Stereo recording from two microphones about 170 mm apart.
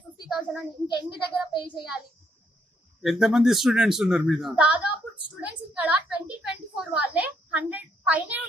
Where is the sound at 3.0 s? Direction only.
Centre (ahead or behind).